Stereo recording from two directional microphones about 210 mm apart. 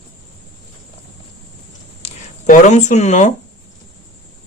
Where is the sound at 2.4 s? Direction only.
35° left (ahead or behind).